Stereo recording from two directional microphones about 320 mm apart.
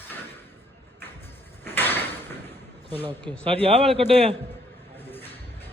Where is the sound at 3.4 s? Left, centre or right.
Centre.